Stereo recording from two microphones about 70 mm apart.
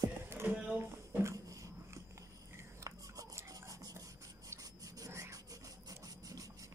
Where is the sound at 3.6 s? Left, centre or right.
Right.